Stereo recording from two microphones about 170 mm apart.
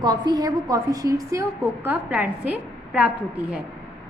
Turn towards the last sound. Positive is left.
turn(degrees=-10)  # may be behind; listen again after turning